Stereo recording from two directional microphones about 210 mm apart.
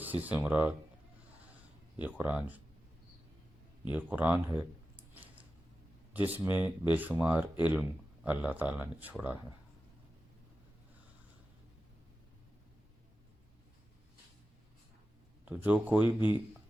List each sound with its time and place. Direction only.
0.0 s speech: 10° right (ahead or behind)
2.0 s speech: 10° right (ahead or behind)
3.9 s a sound: 10° right (ahead or behind)
6.1 s speech: 10° right (ahead or behind)
15.4 s speech: 5° right (ahead or behind)
16.0 s speech: 20° left (ahead or behind)